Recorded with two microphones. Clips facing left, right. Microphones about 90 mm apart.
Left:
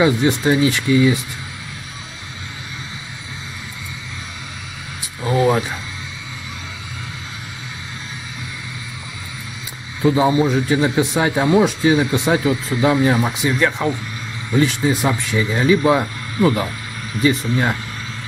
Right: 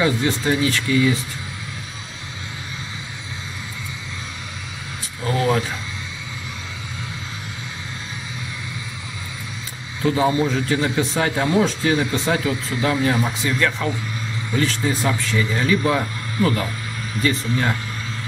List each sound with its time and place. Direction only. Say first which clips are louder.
0.0 s a man's voice: left 4 dB; 20° left (ahead or behind)
5.2 s a sound: left 4 dB; 15° left (ahead or behind)
10.0 s a man's voice: left 3 dB; 15° left (ahead or behind)